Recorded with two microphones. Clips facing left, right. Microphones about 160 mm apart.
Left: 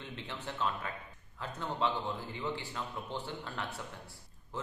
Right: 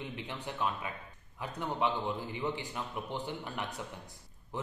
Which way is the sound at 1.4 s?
15° right (ahead or behind).